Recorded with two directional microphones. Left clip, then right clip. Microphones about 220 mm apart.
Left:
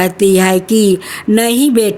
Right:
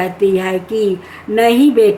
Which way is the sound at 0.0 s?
50° left (ahead or behind).